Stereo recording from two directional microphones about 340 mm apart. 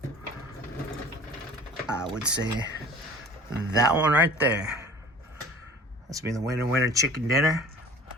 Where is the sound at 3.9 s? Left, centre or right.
Centre.